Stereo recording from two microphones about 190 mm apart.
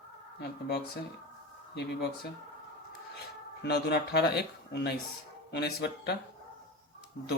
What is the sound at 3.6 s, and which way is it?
Speech, 60° left (ahead or behind).